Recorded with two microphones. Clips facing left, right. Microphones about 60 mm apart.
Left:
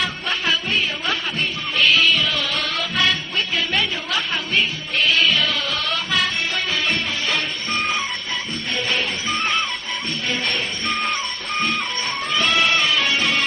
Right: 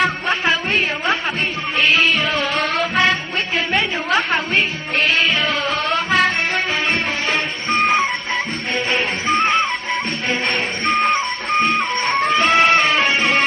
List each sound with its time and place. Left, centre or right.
0.0 s music: right
7.8 s music: right
10.9 s music: right